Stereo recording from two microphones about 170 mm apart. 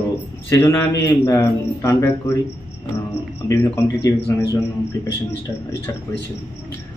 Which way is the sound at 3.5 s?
15° left (ahead or behind).